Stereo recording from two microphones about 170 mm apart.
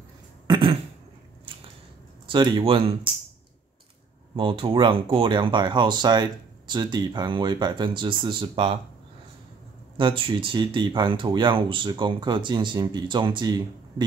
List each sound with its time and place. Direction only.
0.5 s a sound: 35° right (ahead or behind)
2.2 s speech: 25° right (ahead or behind)
4.4 s speech: 30° right (ahead or behind)
9.9 s speech: 30° right (ahead or behind)